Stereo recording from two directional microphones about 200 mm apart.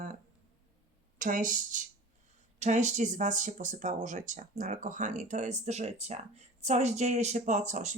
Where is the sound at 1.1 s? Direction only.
40° right (ahead or behind).